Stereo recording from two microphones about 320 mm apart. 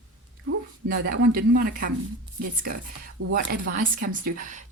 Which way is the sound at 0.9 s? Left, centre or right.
Right.